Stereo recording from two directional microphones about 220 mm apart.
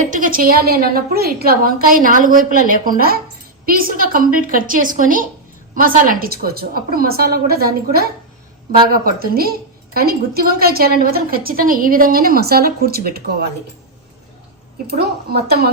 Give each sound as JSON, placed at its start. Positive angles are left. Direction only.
{"t": 0.0, "sound": "a woman's voice", "side_deg": -35}
{"t": 14.8, "sound": "a woman's voice", "side_deg": -45}